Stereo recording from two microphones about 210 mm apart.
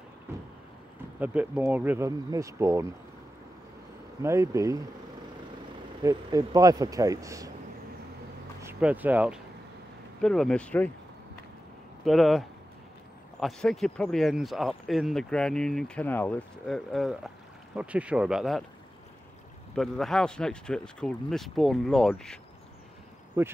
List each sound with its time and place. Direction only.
1.2 s speech: 5° right (ahead or behind)
4.2 s speech: 15° right (ahead or behind)
6.0 s speech: 15° right (ahead or behind)
8.6 s speech: 10° right (ahead or behind)
12.0 s speech: centre (ahead or behind)
19.7 s speech: centre (ahead or behind)
23.4 s speech: 10° right (ahead or behind)